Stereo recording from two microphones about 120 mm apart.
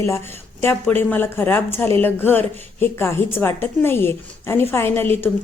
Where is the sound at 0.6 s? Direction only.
15° left (ahead or behind).